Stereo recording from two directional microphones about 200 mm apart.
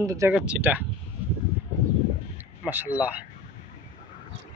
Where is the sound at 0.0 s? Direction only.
15° right (ahead or behind).